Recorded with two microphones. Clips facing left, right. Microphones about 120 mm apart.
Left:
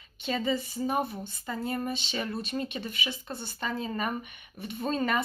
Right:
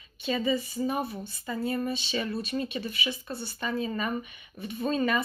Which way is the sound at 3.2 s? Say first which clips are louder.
Right 2 dB; 20° left (ahead or behind).